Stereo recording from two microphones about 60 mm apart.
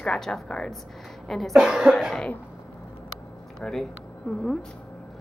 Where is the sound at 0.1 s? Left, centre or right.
Centre.